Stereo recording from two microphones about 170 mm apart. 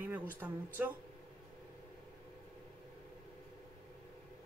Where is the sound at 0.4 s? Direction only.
10° right (ahead or behind).